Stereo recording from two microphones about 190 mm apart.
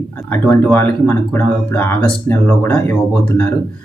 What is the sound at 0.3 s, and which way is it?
Speech, 10° left (ahead or behind).